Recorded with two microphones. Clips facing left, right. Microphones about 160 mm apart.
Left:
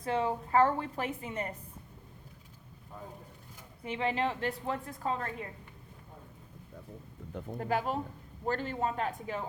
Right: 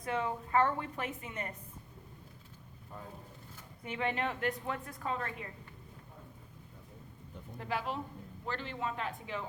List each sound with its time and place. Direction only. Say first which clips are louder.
0.0 s a woman's voice: left 4 dB; 30° left (ahead or behind)
3.8 s a woman's voice: left 3 dB; 30° left (ahead or behind)
7.6 s speech: left 5 dB; 45° left (ahead or behind)